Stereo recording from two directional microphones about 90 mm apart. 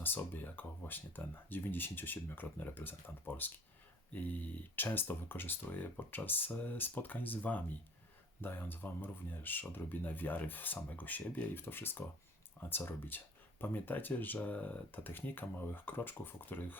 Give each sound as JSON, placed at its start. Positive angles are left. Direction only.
{"t": 0.0, "sound": "speech", "side_deg": 20}